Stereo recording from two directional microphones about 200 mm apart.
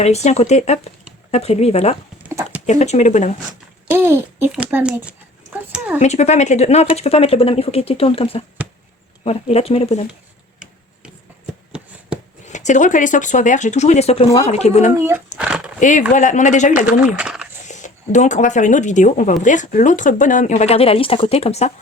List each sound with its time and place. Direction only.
0.0 s speech: 35° left (ahead or behind)
3.8 s a child's voice: 10° right (ahead or behind)
6.0 s speech: 35° left (ahead or behind)
11.7 s shuffling cards: 5° right (ahead or behind)
12.5 s speech: 35° left (ahead or behind)
15.4 s speech: 5° right (ahead or behind)
15.8 s speech: 40° left (ahead or behind)
16.8 s speech: 5° right (ahead or behind)
17.7 s speech: 35° left (ahead or behind)